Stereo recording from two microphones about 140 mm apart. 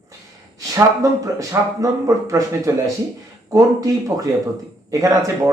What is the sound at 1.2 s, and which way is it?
Speech, 25° right (ahead or behind).